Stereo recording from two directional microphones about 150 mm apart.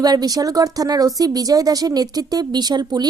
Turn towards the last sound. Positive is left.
turn(degrees=-30)  # may be behind; listen again after turning